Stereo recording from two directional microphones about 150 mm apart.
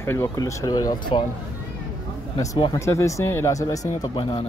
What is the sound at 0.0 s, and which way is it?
Speech, 20° left (ahead or behind).